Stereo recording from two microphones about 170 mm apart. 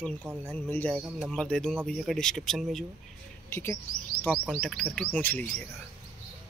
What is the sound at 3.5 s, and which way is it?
Speech, 15° left (ahead or behind).